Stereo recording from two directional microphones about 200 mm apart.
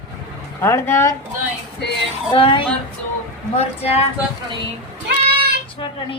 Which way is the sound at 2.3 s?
25° left (ahead or behind).